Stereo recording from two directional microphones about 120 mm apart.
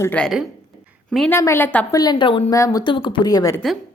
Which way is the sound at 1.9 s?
35° left (ahead or behind).